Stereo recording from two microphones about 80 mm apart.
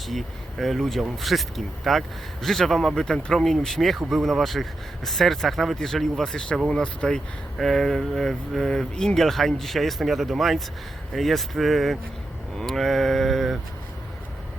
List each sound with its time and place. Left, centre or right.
0.1 s speech: centre